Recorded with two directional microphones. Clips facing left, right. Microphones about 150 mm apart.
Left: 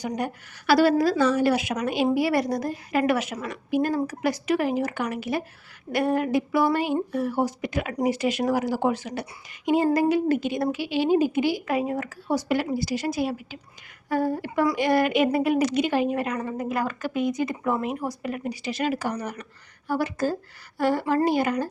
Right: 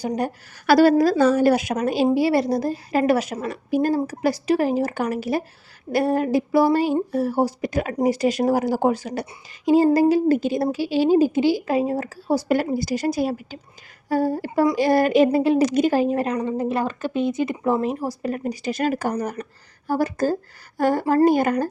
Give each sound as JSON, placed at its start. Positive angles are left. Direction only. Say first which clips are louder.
{"t": 0.0, "sound": "a woman's voice", "louder": "right 4 dB", "side_deg": -30}
{"t": 0.7, "sound": "a woman's voice", "louder": "right 4 dB", "side_deg": -45}
{"t": 2.1, "sound": "a woman's voice", "louder": "right 4 dB", "side_deg": -30}
{"t": 15.7, "sound": "a woman's voice", "louder": "right 4 dB", "side_deg": -40}
{"t": 16.3, "sound": "a woman's voice", "louder": "right 5 dB", "side_deg": -25}